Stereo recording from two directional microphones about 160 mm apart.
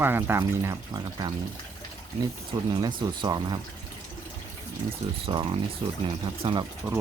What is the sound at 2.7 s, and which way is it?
Speech, 30° right (ahead or behind).